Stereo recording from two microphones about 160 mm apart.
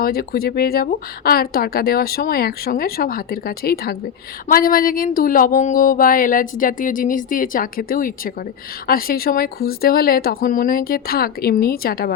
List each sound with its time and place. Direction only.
0.0 s speech: 70° left (ahead or behind)
4.4 s a sound: 60° left (ahead or behind)
8.9 s speech: 65° left (ahead or behind)